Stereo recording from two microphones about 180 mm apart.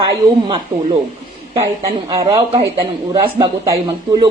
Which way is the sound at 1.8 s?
20° right (ahead or behind).